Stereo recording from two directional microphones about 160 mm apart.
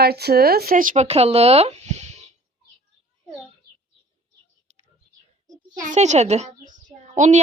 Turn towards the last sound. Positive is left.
turn(degrees=-45)  # may be behind; listen again after turning